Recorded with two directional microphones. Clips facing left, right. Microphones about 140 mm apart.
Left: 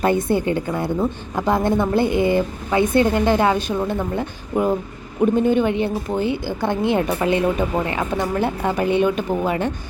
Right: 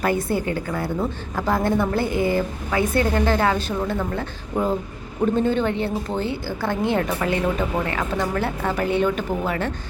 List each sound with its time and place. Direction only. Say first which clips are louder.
0.0 s a woman's voice: left 4 dB; 25° left (ahead or behind)